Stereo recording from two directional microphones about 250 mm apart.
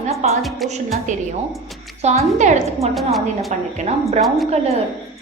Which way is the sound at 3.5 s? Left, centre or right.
Right.